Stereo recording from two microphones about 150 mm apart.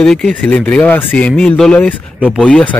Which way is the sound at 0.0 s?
5° left (ahead or behind).